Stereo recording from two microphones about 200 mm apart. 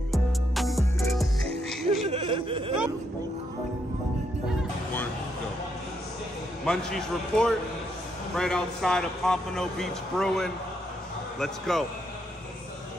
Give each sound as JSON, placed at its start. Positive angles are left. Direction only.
{"t": 0.1, "sound": "music", "side_deg": 0}
{"t": 2.0, "sound": "a sound", "side_deg": -30}
{"t": 6.6, "sound": "a man's voice", "side_deg": 5}